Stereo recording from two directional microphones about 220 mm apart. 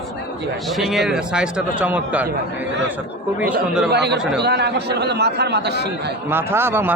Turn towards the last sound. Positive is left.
turn(degrees=-10)  # may be behind; listen again after turning